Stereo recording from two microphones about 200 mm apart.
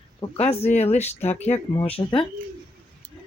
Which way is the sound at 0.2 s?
30° left (ahead or behind).